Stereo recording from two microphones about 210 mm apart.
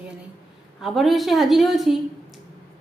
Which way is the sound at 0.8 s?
Centre (ahead or behind).